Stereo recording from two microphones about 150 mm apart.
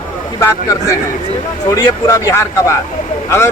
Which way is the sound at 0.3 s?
20° left (ahead or behind).